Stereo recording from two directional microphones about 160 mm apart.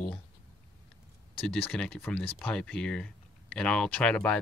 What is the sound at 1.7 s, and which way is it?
Speech, 10° left (ahead or behind).